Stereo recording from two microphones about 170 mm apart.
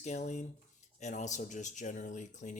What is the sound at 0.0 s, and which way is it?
Speech, 45° left (ahead or behind).